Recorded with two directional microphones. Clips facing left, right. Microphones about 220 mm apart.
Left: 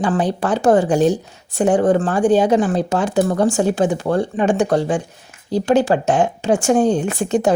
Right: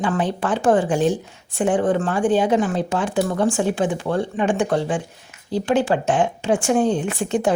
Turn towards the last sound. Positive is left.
turn(degrees=40)  # may be behind; listen again after turning